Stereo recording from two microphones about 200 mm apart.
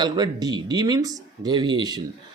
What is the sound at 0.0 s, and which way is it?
Speech, 20° right (ahead or behind).